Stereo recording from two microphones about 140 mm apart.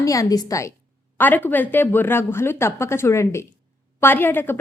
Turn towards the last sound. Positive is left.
turn(degrees=15)  # may be behind; listen again after turning